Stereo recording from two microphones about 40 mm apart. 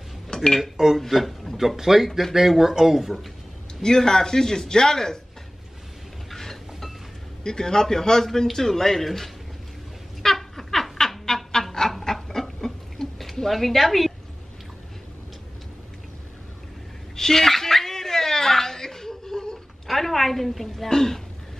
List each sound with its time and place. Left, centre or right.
0.3 s dishes: centre
0.6 s speech: centre
0.9 s speech: centre
1.8 s speech: centre
3.8 s a man's voice: centre
6.3 s chink: centre
7.4 s a man's voice: centre
10.2 s bird: centre
12.0 s a sound: centre
17.1 s chuckle: centre
19.9 s a sound: centre